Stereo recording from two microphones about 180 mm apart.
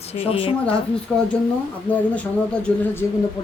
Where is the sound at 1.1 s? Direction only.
5° left (ahead or behind).